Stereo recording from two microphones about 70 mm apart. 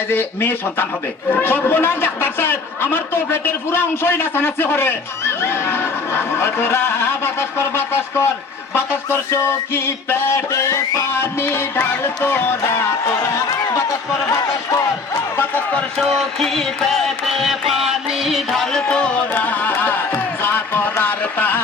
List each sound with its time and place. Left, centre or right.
0.1 s a man's voice: left
10.5 s a man's voice: left
14.7 s speech: left
15.4 s speech: left
16.0 s music: centre; by 21.6 s left